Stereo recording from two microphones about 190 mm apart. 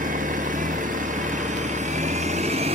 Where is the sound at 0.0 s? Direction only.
45° right (ahead or behind).